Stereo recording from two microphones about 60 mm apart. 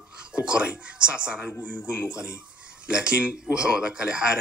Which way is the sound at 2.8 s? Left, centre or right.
Centre.